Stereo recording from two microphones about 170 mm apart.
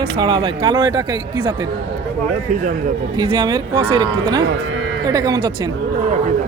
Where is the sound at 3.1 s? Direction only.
25° right (ahead or behind).